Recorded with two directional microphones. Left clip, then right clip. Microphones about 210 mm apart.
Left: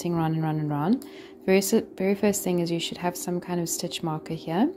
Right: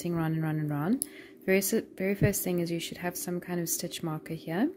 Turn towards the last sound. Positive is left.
turn(degrees=-30)  # may be behind; listen again after turning